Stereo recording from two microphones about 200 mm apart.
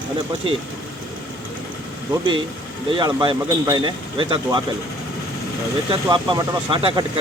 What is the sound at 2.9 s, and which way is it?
Speech, 25° right (ahead or behind).